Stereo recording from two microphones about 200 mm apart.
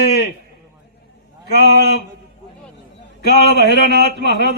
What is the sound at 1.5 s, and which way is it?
Speech, 55° right (ahead or behind).